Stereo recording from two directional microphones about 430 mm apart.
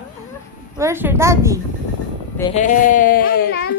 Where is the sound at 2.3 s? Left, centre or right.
Centre.